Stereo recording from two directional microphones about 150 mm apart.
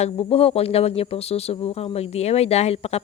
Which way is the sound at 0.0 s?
40° left (ahead or behind).